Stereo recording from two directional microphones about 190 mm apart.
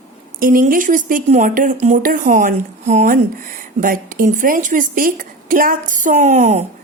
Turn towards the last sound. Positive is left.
turn(degrees=-35)  # may be behind; listen again after turning